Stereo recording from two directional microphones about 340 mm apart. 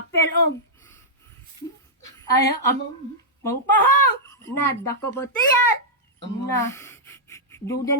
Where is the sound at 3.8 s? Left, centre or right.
Left.